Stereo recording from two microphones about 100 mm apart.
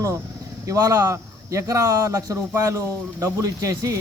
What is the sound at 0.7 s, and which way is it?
Speech, 30° right (ahead or behind).